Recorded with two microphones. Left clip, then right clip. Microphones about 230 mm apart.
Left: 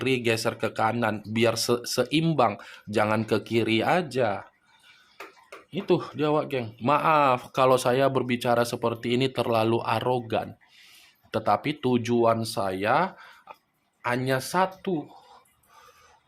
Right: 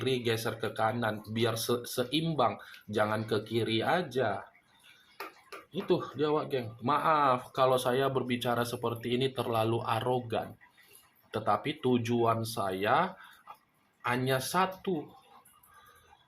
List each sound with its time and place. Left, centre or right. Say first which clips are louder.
0.0 s speech: left 6 dB; left
5.7 s speech: left 5 dB; left